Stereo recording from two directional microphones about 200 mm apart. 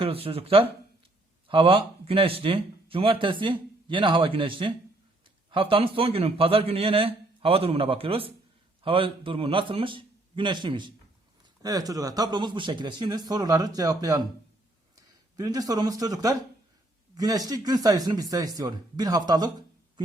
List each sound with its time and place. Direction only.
0.0 s speech: 30° right (ahead or behind)